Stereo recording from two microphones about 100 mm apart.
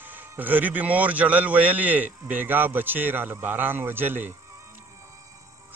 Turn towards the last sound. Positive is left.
turn(degrees=-20)  # may be behind; listen again after turning